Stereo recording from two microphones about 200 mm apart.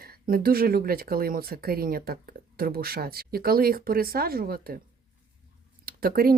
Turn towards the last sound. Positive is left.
turn(degrees=-50)  # may be behind; listen again after turning